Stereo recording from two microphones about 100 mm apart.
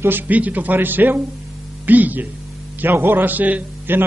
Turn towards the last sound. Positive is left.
turn(degrees=-20)  # may be behind; listen again after turning